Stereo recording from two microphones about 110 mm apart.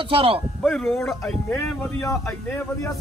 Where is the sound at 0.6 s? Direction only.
5° left (ahead or behind).